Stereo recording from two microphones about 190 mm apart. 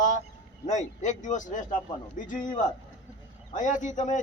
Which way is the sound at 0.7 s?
40° left (ahead or behind).